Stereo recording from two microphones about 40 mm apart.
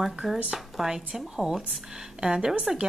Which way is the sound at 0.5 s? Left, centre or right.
Centre.